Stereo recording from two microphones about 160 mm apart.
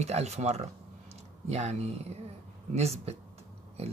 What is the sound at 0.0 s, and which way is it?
Speech, 45° right (ahead or behind).